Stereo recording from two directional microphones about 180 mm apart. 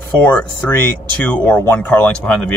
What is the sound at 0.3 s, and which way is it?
Speech, 5° left (ahead or behind).